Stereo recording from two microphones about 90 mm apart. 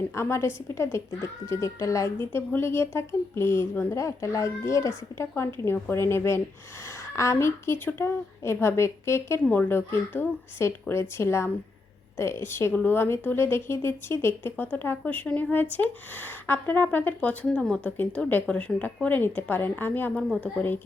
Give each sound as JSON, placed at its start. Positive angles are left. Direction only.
{"t": 0.2, "sound": "a woman's voice", "side_deg": 30}
{"t": 9.4, "sound": "a woman's voice", "side_deg": 20}